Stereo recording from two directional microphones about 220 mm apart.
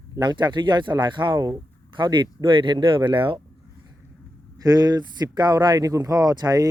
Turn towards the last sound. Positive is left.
turn(degrees=-15)  # may be behind; listen again after turning